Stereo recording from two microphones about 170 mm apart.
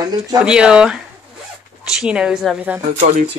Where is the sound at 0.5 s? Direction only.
5° right (ahead or behind).